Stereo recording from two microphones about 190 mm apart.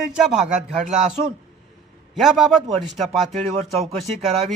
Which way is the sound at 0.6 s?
40° right (ahead or behind).